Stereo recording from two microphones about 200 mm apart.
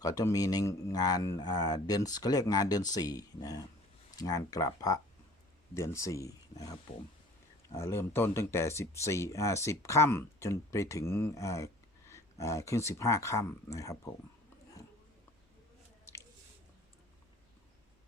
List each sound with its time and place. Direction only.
0.0 s speech: 20° left (ahead or behind)